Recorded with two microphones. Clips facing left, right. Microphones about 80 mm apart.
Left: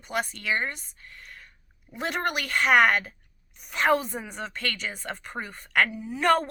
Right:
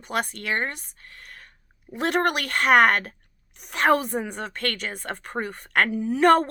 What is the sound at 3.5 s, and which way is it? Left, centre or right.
Speech, right.